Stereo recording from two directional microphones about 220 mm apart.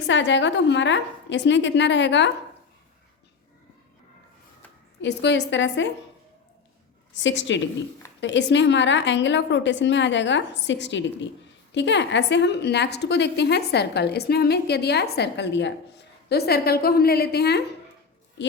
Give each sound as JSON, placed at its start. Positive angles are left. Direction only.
{"t": 0.1, "sound": "a woman's voice", "side_deg": 55}
{"t": 4.9, "sound": "a woman's voice", "side_deg": 55}
{"t": 7.1, "sound": "a woman's voice", "side_deg": 55}